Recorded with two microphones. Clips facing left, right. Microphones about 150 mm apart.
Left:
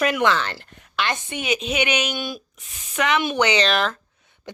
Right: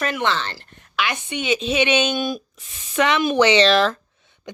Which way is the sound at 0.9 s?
10° right (ahead or behind).